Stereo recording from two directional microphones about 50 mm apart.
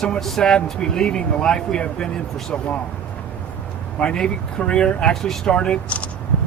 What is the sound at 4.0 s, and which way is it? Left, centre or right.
Speech, left.